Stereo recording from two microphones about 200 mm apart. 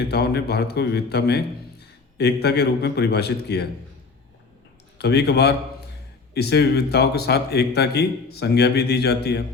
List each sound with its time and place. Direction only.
0.1 s a man's voice: 55° left (ahead or behind)
4.9 s a man's voice: 55° left (ahead or behind)